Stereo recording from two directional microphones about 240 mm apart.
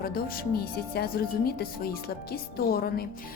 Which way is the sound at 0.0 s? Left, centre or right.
Left.